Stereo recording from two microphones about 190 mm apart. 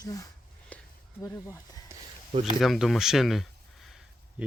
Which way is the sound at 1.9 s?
15° right (ahead or behind).